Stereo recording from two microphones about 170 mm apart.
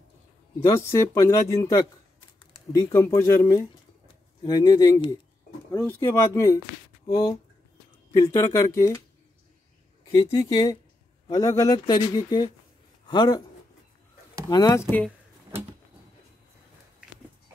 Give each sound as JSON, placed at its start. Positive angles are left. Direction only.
{"t": 0.7, "sound": "speech", "side_deg": 15}
{"t": 10.1, "sound": "speech", "side_deg": 25}
{"t": 14.7, "sound": "speech", "side_deg": 10}